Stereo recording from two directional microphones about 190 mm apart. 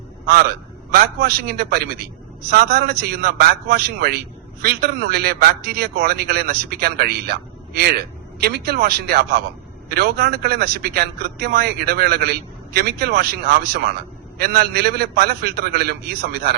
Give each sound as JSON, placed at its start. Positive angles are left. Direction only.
{"t": 0.3, "sound": "a man's voice", "side_deg": -55}